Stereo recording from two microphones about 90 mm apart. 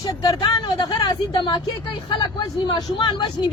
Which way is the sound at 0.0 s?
45° left (ahead or behind).